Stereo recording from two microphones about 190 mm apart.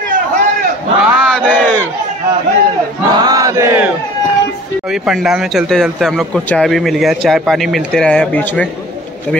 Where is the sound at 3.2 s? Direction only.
15° right (ahead or behind).